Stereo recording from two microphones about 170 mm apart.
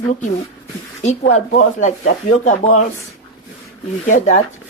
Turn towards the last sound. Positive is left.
turn(degrees=50)  # may be behind; listen again after turning